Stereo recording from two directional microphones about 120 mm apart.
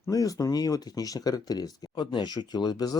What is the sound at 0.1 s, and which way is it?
Speech, 30° left (ahead or behind).